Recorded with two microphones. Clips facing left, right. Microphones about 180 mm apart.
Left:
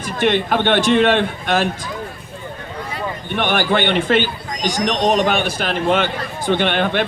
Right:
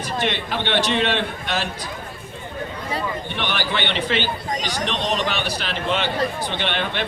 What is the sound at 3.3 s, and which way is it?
A man's voice, 50° left (ahead or behind).